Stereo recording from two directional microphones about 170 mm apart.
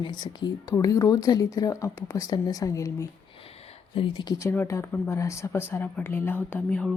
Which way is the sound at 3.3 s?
35° left (ahead or behind).